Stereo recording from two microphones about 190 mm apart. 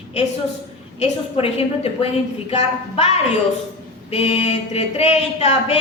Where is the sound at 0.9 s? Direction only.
30° left (ahead or behind).